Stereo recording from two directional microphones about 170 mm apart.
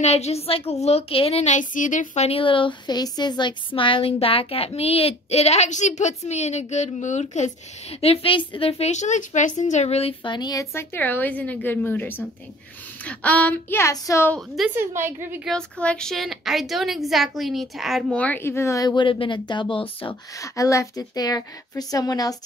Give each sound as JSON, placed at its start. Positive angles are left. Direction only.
{"t": 0.0, "sound": "a woman's voice", "side_deg": 40}
{"t": 14.8, "sound": "a woman's voice", "side_deg": -15}
{"t": 15.4, "sound": "a woman's voice", "side_deg": 5}
{"t": 20.3, "sound": "a woman's voice", "side_deg": 20}